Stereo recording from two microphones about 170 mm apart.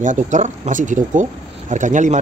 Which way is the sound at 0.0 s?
45° right (ahead or behind).